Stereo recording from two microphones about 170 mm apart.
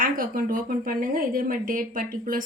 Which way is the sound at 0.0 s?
55° right (ahead or behind).